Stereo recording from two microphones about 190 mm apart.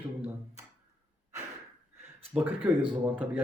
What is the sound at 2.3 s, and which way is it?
Speech, 10° right (ahead or behind).